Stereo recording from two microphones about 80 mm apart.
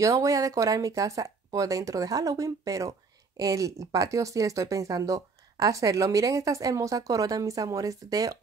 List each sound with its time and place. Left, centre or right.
0.0 s speech: right